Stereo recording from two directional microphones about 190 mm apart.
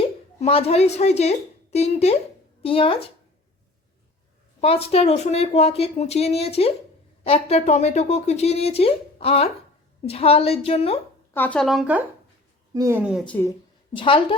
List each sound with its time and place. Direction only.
0.0 s a woman's voice: 30° left (ahead or behind)
4.6 s speech: 30° left (ahead or behind)
11.3 s speech: 5° left (ahead or behind)
12.7 s speech: 15° right (ahead or behind)
13.2 s speech: 10° left (ahead or behind)
13.9 s a woman's voice: 25° left (ahead or behind)